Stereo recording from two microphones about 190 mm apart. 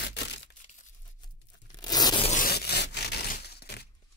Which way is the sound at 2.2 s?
40° left (ahead or behind).